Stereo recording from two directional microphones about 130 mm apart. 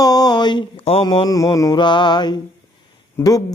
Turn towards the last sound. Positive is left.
turn(degrees=30)  # may be behind; listen again after turning